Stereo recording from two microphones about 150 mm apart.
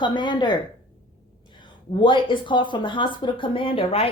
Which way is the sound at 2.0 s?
35° left (ahead or behind).